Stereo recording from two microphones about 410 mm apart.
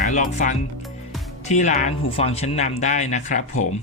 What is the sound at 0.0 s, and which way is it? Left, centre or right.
Speech, centre.